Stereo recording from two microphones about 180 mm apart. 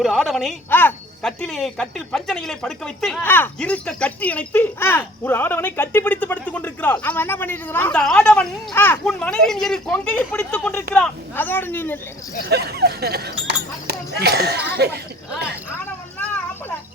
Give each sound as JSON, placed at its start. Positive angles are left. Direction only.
{"t": 0.0, "sound": "a woman's voice", "side_deg": 0}
{"t": 12.5, "sound": "speech", "side_deg": -65}
{"t": 16.1, "sound": "vehicle", "side_deg": 10}